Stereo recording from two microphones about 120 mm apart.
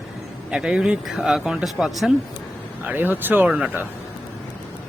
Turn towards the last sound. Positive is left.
turn(degrees=-10)  # may be behind; listen again after turning